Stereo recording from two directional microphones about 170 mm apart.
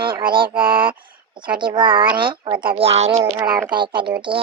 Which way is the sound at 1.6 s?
30° right (ahead or behind).